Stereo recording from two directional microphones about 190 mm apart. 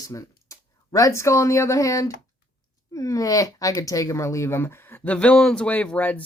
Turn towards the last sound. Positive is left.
turn(degrees=10)  # may be behind; listen again after turning